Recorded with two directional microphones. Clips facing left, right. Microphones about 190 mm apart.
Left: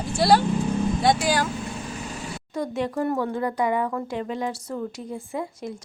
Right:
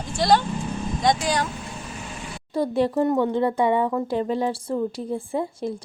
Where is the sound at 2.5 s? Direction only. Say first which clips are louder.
Right 5 dB; 30° right (ahead or behind).